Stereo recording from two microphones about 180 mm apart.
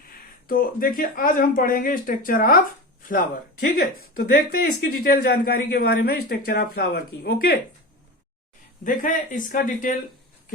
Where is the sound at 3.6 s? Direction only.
50° left (ahead or behind).